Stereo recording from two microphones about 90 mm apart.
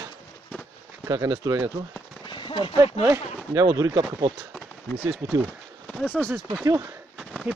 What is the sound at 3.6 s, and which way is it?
Speech, 40° right (ahead or behind).